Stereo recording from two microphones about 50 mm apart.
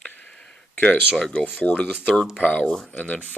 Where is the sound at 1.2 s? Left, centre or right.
Centre.